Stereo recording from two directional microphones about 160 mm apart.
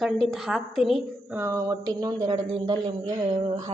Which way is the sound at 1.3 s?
20° right (ahead or behind).